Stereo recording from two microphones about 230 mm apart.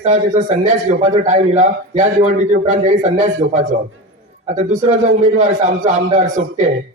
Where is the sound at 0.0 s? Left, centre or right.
Right.